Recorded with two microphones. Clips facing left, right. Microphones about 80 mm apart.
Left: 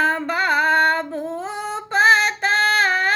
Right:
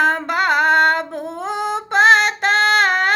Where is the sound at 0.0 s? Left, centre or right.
Right.